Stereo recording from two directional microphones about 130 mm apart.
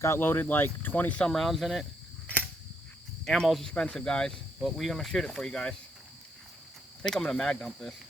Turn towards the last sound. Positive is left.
turn(degrees=5)  # may be behind; listen again after turning